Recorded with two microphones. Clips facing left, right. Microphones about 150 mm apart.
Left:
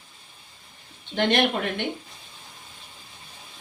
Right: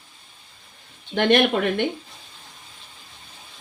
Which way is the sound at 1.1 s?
55° right (ahead or behind).